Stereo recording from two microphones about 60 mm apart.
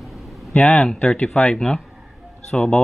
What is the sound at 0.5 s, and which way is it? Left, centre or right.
Speech, centre.